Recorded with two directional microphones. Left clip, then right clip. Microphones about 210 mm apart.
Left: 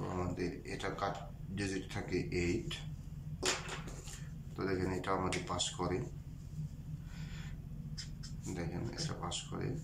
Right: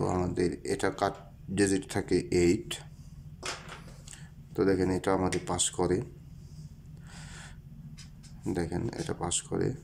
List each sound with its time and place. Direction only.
0.1 s speech: 35° right (ahead or behind)
4.6 s speech: 30° right (ahead or behind)
8.5 s speech: 35° right (ahead or behind)